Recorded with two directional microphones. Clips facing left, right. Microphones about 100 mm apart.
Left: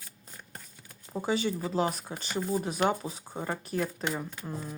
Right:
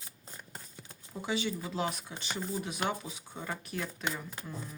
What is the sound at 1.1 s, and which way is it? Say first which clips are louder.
Speech: left 5 dB; 40° left (ahead or behind).